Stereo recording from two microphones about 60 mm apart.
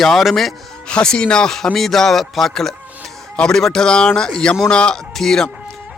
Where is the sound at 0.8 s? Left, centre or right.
Centre.